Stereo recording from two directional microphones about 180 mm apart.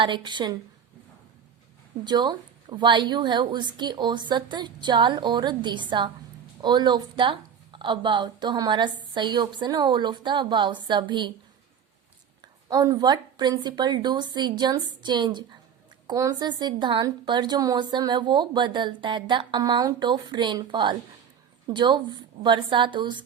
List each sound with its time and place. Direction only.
0.0 s a woman's voice: 25° right (ahead or behind)
2.0 s a woman's voice: 25° right (ahead or behind)
12.6 s a woman's voice: 20° right (ahead or behind)